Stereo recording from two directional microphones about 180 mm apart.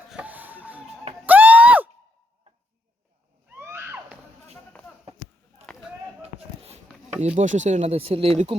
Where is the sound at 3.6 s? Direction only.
15° right (ahead or behind).